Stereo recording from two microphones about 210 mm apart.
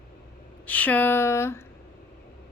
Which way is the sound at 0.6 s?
5° left (ahead or behind).